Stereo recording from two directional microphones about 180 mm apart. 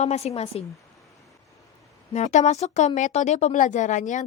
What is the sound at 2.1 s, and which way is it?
Speech, 40° left (ahead or behind).